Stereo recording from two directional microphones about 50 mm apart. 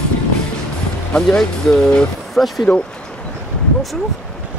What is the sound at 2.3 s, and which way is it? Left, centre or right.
Speech, centre.